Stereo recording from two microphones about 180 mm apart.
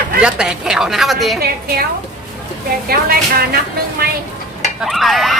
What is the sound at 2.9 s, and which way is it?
Speech, 55° right (ahead or behind).